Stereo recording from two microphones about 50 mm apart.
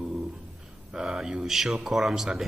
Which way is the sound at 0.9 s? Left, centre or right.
Centre.